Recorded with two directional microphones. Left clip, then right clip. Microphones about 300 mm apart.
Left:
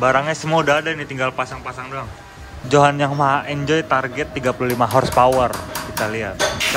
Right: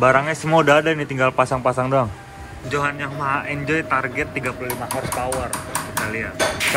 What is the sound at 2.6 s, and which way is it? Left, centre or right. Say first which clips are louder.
Speech: left 8 dB; centre.